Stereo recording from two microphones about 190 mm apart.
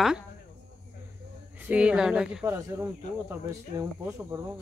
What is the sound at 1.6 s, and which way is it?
Speech, 5° right (ahead or behind).